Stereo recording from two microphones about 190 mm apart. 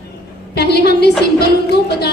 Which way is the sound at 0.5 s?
60° left (ahead or behind).